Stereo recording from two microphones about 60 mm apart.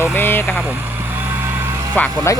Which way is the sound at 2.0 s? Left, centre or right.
Left.